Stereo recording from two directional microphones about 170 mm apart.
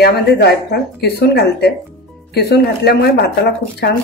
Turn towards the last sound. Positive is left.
turn(degrees=70)  # may be behind; listen again after turning